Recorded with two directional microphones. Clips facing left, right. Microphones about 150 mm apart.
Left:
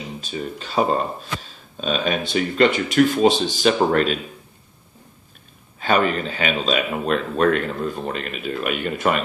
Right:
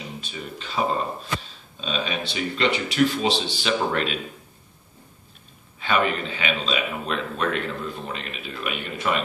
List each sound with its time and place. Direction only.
0.2 s speech: 40° left (ahead or behind)
1.4 s speech: 50° left (ahead or behind)
5.8 s speech: 40° left (ahead or behind)